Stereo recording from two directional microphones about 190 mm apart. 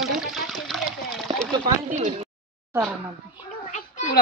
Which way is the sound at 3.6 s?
40° left (ahead or behind).